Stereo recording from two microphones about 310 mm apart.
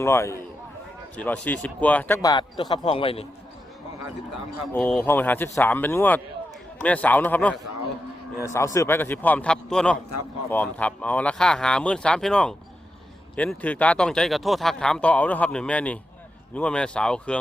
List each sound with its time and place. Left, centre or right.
0.0 s speech: centre
4.7 s speech: centre